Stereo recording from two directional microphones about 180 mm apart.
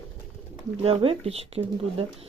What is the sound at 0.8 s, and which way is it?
Speech, 35° right (ahead or behind).